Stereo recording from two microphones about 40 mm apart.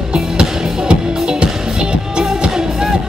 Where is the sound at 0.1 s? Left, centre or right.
Right.